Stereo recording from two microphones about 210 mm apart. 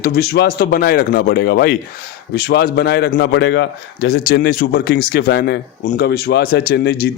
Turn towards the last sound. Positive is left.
turn(degrees=50)  # may be behind; listen again after turning